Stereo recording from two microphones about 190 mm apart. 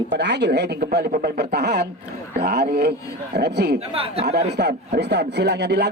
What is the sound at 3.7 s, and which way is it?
Speech, 30° right (ahead or behind).